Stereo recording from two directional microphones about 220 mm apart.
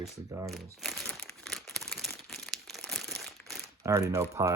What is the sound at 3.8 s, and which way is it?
Speech, 15° right (ahead or behind).